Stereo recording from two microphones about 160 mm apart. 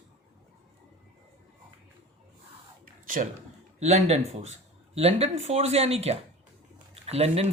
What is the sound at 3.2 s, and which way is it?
A man's voice, 50° right (ahead or behind).